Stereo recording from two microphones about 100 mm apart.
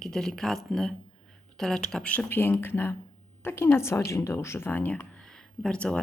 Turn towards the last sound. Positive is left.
turn(degrees=10)  # may be behind; listen again after turning